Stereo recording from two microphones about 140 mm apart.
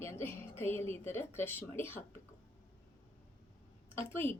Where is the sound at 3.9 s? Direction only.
15° left (ahead or behind).